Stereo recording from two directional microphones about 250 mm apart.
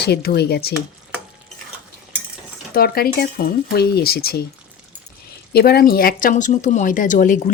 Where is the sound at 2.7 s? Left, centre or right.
Left.